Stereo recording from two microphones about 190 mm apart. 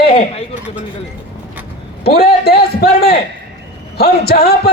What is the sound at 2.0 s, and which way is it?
A man's voice, 55° left (ahead or behind).